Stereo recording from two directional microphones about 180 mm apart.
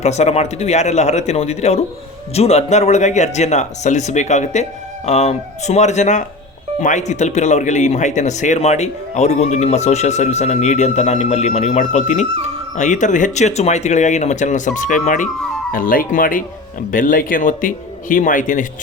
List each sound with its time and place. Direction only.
0.0 s speech: 35° left (ahead or behind)